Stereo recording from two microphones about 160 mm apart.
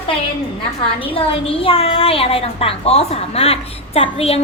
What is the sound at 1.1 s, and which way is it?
A woman's voice, 35° left (ahead or behind).